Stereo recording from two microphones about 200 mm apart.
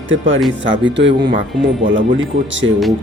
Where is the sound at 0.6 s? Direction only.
65° right (ahead or behind).